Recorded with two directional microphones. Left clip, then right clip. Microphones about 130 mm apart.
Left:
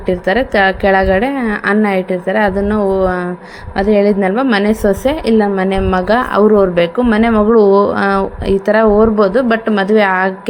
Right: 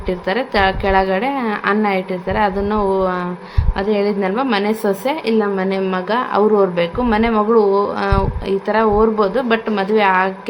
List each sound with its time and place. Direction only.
0.1 s a woman's voice: 25° left (ahead or behind)